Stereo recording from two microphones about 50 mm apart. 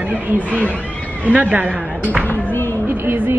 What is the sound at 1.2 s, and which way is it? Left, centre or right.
Speech, right.